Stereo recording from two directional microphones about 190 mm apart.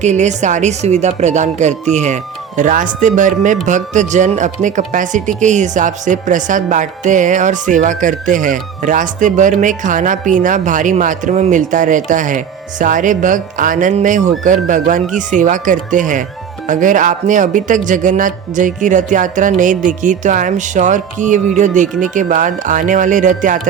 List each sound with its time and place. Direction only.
0.0 s speech: 35° right (ahead or behind)